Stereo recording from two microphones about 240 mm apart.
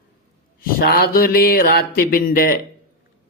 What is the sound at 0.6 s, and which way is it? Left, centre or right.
Speech, left.